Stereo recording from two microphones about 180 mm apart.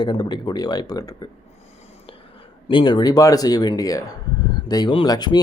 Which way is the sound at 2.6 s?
25° left (ahead or behind).